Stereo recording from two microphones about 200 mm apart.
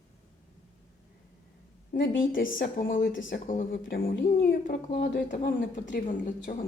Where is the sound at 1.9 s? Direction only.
45° left (ahead or behind).